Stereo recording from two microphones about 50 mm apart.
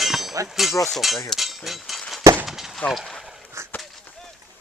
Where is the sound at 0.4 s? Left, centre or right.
Centre.